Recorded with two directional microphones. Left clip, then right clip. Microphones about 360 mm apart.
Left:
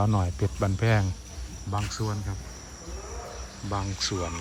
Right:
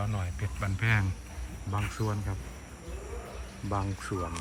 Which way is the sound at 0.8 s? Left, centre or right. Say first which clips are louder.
Right 1 dB; centre.